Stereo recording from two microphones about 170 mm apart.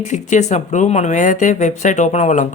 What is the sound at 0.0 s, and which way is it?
Speech, 45° left (ahead or behind).